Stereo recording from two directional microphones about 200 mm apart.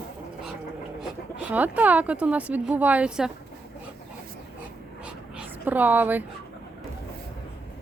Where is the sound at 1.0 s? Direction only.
5° right (ahead or behind).